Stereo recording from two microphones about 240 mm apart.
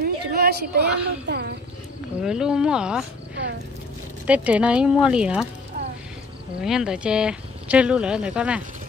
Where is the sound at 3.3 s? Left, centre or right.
Right.